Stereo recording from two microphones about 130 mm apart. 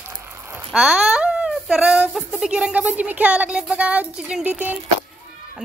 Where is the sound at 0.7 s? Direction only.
5° right (ahead or behind).